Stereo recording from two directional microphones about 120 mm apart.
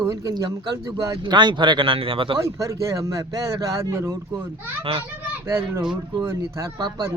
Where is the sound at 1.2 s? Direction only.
40° right (ahead or behind).